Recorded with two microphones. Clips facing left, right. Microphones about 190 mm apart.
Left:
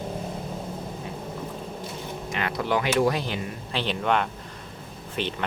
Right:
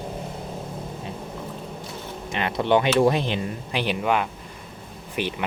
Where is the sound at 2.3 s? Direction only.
25° right (ahead or behind).